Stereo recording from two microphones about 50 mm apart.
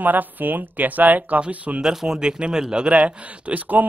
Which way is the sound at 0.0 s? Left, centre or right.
Right.